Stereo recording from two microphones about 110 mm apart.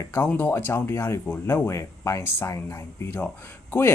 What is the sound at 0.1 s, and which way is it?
Speech, 20° left (ahead or behind).